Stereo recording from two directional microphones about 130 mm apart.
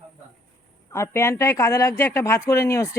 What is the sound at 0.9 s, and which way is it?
Speech, 20° left (ahead or behind).